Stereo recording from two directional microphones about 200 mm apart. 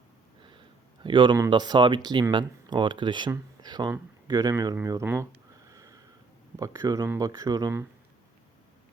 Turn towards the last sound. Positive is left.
turn(degrees=-15)  # may be behind; listen again after turning